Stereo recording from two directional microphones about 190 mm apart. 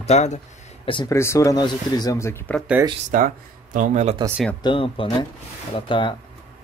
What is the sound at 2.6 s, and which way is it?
Speech, 5° right (ahead or behind).